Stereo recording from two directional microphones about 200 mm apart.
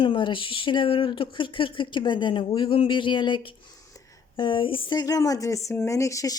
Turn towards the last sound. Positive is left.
turn(degrees=15)  # may be behind; listen again after turning